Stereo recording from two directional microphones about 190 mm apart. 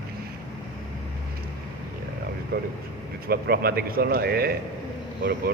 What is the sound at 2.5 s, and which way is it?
Speech, 50° right (ahead or behind).